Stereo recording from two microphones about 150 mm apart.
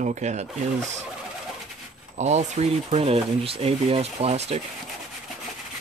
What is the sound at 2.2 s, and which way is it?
Speech, 45° right (ahead or behind).